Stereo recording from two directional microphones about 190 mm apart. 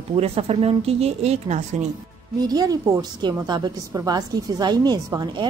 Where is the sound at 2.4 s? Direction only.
20° right (ahead or behind).